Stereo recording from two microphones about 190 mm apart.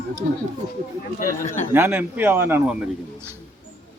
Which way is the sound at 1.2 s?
40° left (ahead or behind).